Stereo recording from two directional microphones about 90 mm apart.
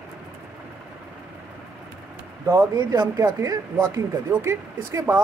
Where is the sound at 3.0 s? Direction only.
45° right (ahead or behind).